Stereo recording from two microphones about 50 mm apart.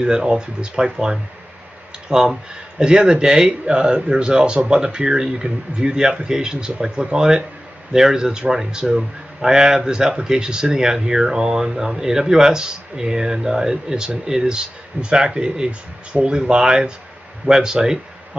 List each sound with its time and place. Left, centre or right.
0.0 s speech: centre